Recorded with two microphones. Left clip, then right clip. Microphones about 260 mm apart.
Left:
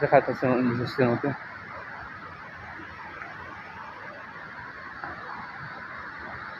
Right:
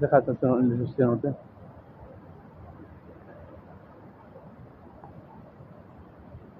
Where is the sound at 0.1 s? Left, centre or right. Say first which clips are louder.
Left 1 dB; left.